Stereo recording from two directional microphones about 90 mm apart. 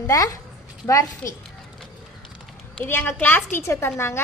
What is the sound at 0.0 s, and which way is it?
A woman's voice, 40° left (ahead or behind).